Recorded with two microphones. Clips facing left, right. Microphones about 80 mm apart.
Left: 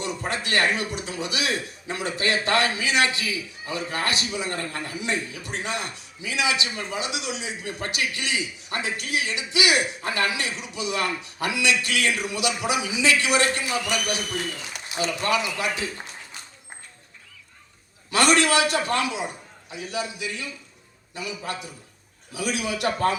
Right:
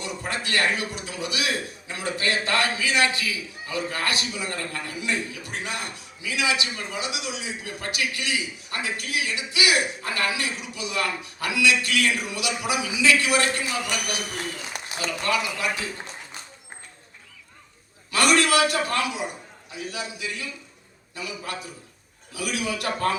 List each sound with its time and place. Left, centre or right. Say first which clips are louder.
0.0 s a man's voice: left 2 dB; left
14.9 s a man's voice: left 2 dB; left
18.1 s a man's voice: left 1 dB; left